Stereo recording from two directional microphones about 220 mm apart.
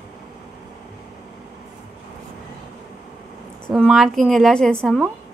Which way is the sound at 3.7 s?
Centre (ahead or behind).